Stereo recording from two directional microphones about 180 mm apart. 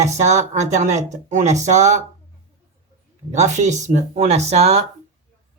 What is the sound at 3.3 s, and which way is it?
Speech, 40° right (ahead or behind).